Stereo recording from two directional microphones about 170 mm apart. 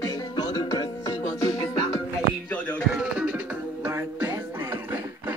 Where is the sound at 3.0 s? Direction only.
5° right (ahead or behind).